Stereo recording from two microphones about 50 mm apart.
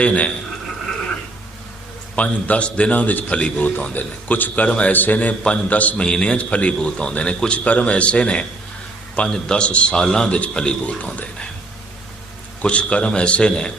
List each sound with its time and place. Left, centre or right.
0.0 s a man's voice: left
2.1 s a man's voice: left
6.0 s a man's voice: centre
12.6 s a man's voice: left